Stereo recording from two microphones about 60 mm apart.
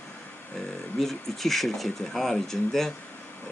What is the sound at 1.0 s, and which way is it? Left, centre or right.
Speech, centre.